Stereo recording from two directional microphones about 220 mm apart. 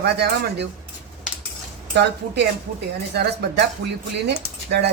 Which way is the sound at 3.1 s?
50° right (ahead or behind).